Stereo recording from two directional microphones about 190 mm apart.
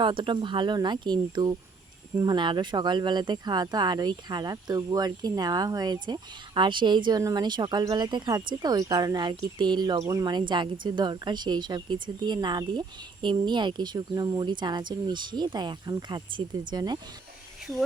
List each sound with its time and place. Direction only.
0.0 s speech: 25° right (ahead or behind)